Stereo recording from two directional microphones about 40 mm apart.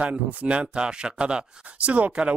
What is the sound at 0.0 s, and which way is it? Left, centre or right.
Speech, right.